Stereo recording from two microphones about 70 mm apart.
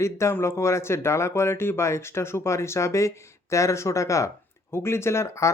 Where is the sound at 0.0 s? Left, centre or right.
Left.